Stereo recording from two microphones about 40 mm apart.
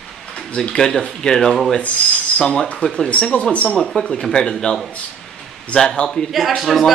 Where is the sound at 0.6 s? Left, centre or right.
Centre.